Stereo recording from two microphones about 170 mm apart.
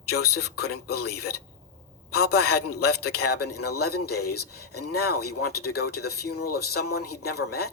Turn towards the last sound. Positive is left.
turn(degrees=70)  # may be behind; listen again after turning